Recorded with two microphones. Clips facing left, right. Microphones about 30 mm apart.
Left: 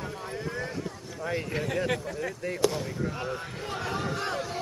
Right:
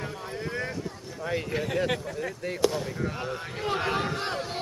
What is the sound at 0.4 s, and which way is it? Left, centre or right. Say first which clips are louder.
Boat: right 3 dB; centre.